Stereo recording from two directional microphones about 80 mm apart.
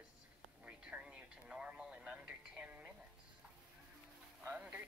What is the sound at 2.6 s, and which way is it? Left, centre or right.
Music, centre.